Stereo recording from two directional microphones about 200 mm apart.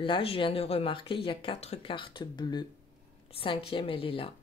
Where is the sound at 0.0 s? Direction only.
25° left (ahead or behind).